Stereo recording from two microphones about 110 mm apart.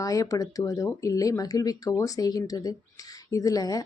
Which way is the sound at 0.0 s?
30° left (ahead or behind).